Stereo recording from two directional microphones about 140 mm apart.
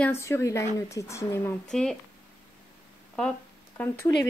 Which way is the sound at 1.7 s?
5° left (ahead or behind).